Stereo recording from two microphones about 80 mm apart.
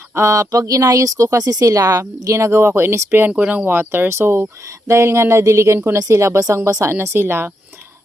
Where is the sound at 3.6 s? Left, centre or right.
Right.